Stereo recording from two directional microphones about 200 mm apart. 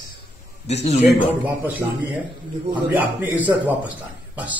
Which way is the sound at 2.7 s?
20° right (ahead or behind).